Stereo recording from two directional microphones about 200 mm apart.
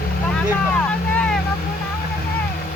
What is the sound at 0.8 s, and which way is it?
Vehicle, 5° left (ahead or behind).